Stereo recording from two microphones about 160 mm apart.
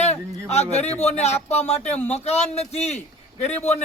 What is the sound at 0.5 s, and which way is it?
A man's voice, 40° left (ahead or behind).